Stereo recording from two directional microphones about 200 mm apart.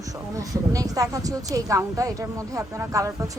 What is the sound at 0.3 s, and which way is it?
Speech, 15° right (ahead or behind).